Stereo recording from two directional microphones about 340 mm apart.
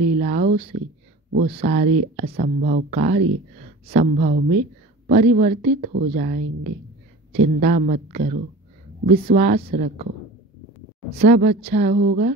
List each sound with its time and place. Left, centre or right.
0.0 s a sound: centre
1.6 s speech: right
11.1 s speech: centre